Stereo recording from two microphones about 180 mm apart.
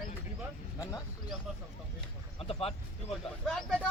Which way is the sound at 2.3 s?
30° left (ahead or behind).